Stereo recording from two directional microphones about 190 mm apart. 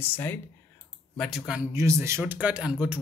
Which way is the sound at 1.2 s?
Centre (ahead or behind).